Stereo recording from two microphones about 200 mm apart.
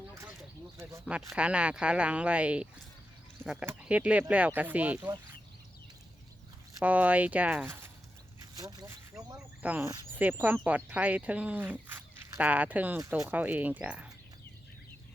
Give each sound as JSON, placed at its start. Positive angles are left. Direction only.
{"t": 0.1, "sound": "a sound", "side_deg": -15}
{"t": 0.8, "sound": "speech", "side_deg": -15}
{"t": 6.7, "sound": "speech", "side_deg": -5}
{"t": 9.6, "sound": "speech", "side_deg": -10}